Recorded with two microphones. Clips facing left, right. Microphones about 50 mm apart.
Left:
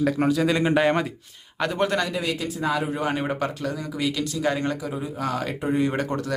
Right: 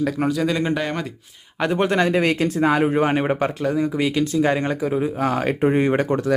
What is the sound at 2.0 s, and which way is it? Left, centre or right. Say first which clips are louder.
Speech: right 8 dB; right.